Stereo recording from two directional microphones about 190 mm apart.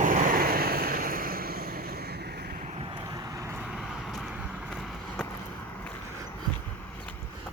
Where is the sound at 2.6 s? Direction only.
30° right (ahead or behind).